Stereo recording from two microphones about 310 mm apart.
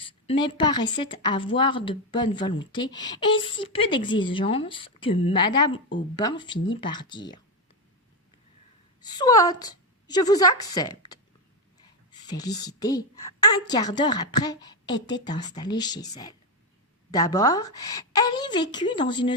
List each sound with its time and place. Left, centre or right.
0.0 s speech: centre
9.0 s a woman's voice: centre
12.2 s speech: centre
17.1 s speech: centre